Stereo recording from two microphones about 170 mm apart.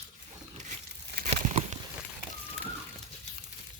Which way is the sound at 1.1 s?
45° right (ahead or behind).